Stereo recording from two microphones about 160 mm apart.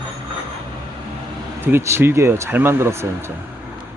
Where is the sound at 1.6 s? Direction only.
15° right (ahead or behind).